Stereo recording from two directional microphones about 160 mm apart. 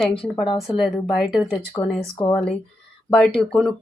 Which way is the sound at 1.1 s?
5° right (ahead or behind).